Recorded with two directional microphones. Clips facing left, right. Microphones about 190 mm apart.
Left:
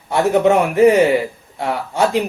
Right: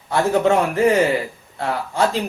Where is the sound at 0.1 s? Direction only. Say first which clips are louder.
Left 3 dB; 20° left (ahead or behind).